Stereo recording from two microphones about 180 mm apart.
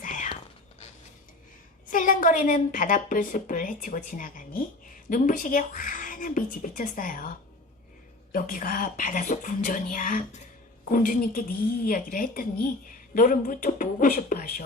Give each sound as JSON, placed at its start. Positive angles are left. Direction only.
{"t": 0.0, "sound": "whispering", "side_deg": 45}
{"t": 1.9, "sound": "a woman's voice", "side_deg": 50}